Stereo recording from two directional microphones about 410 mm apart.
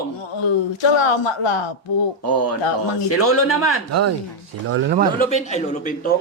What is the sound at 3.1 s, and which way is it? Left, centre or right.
Speech, left.